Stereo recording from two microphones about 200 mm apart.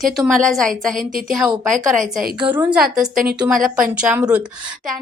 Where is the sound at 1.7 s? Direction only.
40° right (ahead or behind).